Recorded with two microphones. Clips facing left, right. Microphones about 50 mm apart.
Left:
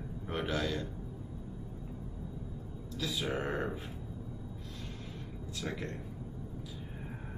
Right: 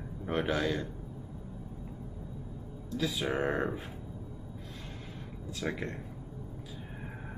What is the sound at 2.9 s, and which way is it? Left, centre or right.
Speech, right.